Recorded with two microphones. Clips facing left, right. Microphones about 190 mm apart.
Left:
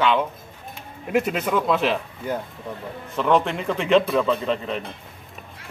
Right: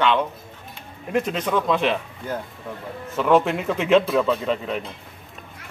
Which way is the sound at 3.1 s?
5° right (ahead or behind).